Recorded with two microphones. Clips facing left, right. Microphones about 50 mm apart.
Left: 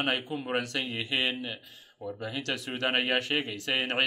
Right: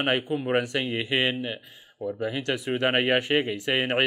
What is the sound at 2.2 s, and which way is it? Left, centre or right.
Speech, centre.